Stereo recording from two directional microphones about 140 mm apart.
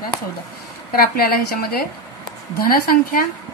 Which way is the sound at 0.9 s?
90° left.